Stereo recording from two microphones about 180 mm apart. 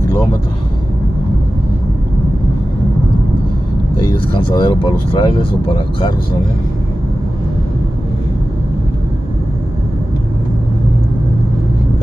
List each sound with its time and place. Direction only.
4.3 s speech: 25° left (ahead or behind)